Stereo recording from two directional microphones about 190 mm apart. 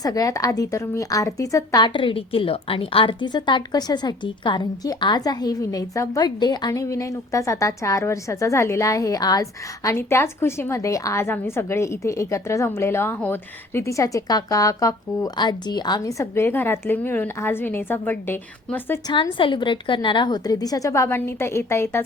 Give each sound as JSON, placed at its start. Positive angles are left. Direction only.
{"t": 0.0, "sound": "a woman's voice", "side_deg": 20}
{"t": 19.1, "sound": "a woman's voice", "side_deg": 25}